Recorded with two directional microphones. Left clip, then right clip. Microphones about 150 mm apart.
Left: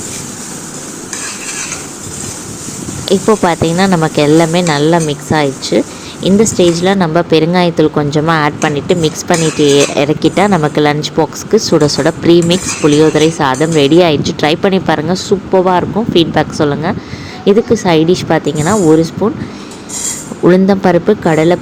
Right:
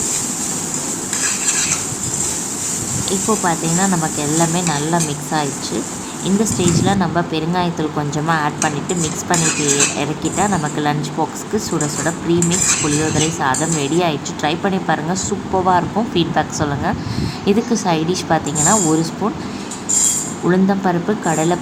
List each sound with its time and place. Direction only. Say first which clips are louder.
3.1 s speech: left 9 dB; 55° left (ahead or behind)
15.1 s speech: left 8 dB; 30° left (ahead or behind)
20.5 s speech: left 8 dB; 40° left (ahead or behind)